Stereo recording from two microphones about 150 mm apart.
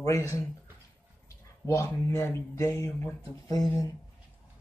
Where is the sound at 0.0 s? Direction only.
20° left (ahead or behind).